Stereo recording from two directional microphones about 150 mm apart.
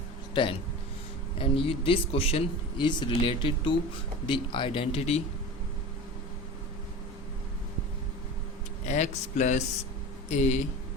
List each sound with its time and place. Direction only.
0.4 s speech: 30° left (ahead or behind)
8.9 s speech: 50° left (ahead or behind)